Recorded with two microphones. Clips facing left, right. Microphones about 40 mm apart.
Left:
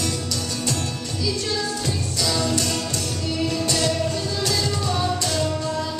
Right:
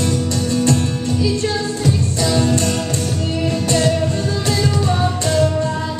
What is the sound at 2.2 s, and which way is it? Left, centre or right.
Music, right.